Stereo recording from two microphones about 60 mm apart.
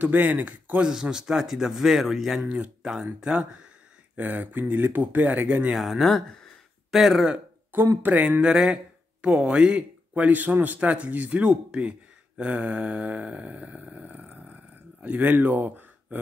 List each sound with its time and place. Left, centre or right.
0.0 s speech: right
0.8 s a man's voice: centre
2.4 s a man's voice: centre
4.2 s speech: right
5.8 s speech: centre
8.0 s speech: right
8.4 s a man's voice: centre
12.4 s a sound: right